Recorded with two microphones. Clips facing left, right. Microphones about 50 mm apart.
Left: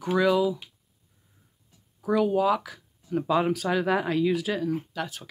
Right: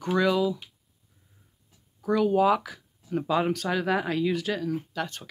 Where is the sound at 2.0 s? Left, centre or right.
Centre.